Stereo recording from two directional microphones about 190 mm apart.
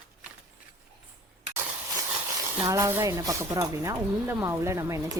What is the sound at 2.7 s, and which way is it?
Speech, 15° right (ahead or behind).